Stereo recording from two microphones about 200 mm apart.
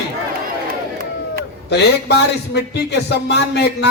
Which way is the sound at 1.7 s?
55° left (ahead or behind).